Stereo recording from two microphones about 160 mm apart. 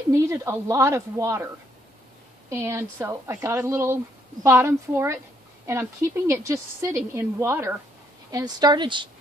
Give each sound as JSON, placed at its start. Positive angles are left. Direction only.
{"t": 0.1, "sound": "speech", "side_deg": -20}
{"t": 2.5, "sound": "speech", "side_deg": -15}